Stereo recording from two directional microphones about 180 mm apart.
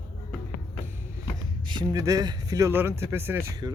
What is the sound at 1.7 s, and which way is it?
Speech, 20° right (ahead or behind).